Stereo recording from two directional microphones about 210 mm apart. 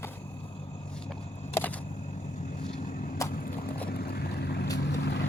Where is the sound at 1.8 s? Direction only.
30° left (ahead or behind).